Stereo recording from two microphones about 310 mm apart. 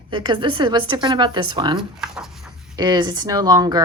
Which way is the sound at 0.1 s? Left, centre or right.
Centre.